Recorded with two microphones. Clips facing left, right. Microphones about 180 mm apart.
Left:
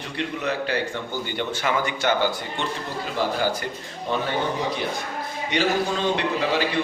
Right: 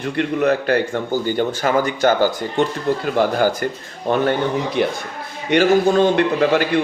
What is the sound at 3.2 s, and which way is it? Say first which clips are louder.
Speech: right 5 dB; 55° right (ahead or behind).